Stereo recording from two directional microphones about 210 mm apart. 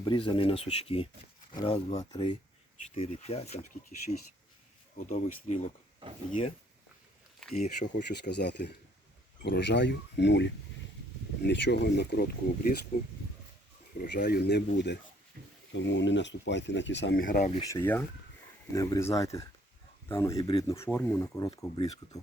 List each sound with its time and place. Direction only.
0.0 s speech: 25° left (ahead or behind)
4.9 s speech: 35° left (ahead or behind)
7.5 s speech: 35° left (ahead or behind)
8.2 s speech: 55° left (ahead or behind)
15.4 s a sound: 50° right (ahead or behind)
15.7 s speech: 60° left (ahead or behind)
17.2 s speech: 40° left (ahead or behind)
17.7 s speech: 10° left (ahead or behind)
20.3 s speech: 25° left (ahead or behind)